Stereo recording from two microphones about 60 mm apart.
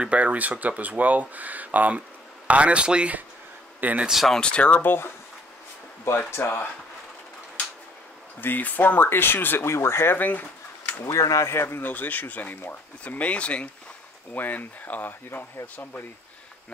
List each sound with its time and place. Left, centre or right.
0.0 s speech: right
4.1 s speech: centre
4.4 s speech: centre; by 5.1 s left
6.1 s speech: left
8.4 s speech: left
10.1 s speech: left
11.1 s speech: left
11.4 s speech: left
11.8 s speech: left
14.3 s speech: left